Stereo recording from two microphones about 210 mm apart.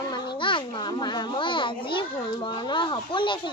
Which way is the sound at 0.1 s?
25° left (ahead or behind).